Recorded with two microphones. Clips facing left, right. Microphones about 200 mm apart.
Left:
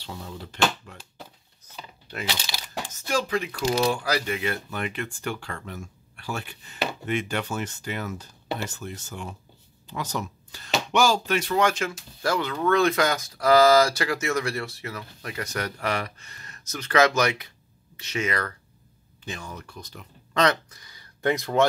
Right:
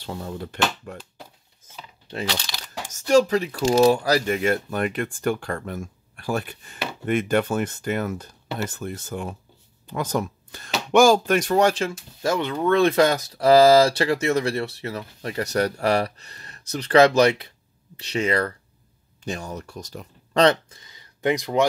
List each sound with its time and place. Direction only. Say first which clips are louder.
0.0 s speech: right 6 dB; 50° right (ahead or behind)
2.9 s speech: right 9 dB; 40° right (ahead or behind)
19.2 s speech: right 6 dB; 40° right (ahead or behind); by 21.6 s 15° right (ahead or behind)